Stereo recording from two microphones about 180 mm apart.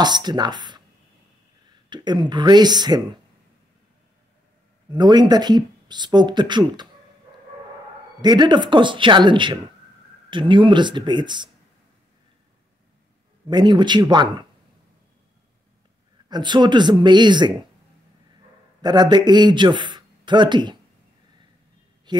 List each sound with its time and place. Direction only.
0.0 s speech: 25° right (ahead or behind)
1.9 s speech: 25° right (ahead or behind)
4.9 s speech: 25° right (ahead or behind)
8.2 s speech: 25° right (ahead or behind)
13.5 s speech: 25° right (ahead or behind)
16.3 s speech: 25° right (ahead or behind)
18.8 s a man's voice: 25° right (ahead or behind)